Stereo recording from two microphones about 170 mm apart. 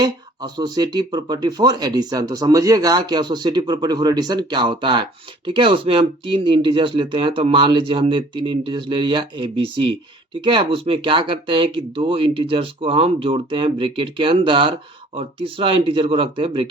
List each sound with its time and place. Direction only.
0.0 s speech: 25° right (ahead or behind)